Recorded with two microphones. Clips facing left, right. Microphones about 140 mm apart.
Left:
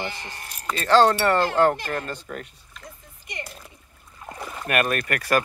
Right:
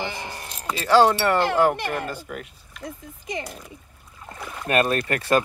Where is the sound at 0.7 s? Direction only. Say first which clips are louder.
Even; 10° right (ahead or behind).